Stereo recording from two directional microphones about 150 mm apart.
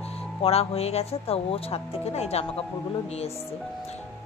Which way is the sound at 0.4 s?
40° left (ahead or behind).